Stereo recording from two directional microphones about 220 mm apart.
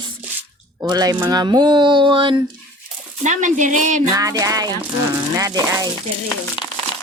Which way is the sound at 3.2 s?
35° right (ahead or behind).